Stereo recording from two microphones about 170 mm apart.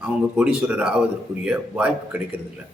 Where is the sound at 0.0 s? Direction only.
5° right (ahead or behind).